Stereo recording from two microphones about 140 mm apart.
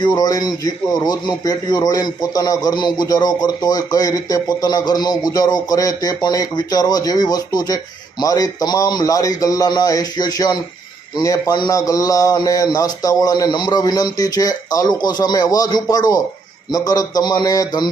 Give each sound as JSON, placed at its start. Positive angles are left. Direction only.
{"t": 0.0, "sound": "a man's voice", "side_deg": 25}